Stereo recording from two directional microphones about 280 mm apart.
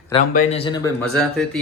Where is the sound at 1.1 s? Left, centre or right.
Centre.